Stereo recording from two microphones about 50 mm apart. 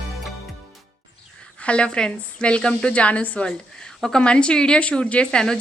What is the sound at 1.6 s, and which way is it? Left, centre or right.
Speech, left.